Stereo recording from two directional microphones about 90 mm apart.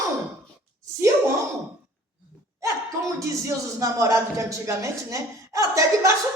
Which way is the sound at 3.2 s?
35° right (ahead or behind).